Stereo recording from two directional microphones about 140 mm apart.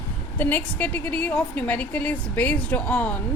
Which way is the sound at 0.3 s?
10° left (ahead or behind).